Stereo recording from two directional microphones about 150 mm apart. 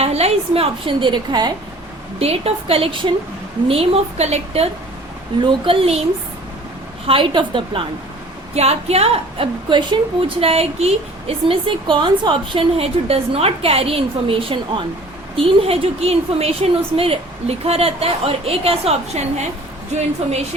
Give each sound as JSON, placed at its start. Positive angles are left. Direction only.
{"t": 0.0, "sound": "a woman's voice", "side_deg": -45}
{"t": 2.1, "sound": "a woman's voice", "side_deg": -40}
{"t": 7.1, "sound": "a woman's voice", "side_deg": -35}